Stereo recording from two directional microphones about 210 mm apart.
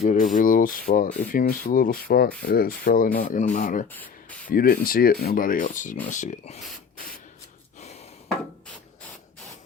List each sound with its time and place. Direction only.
0.0 s speech: 35° left (ahead or behind)
4.0 s spray: 5° left (ahead or behind)
4.5 s speech: 45° left (ahead or behind)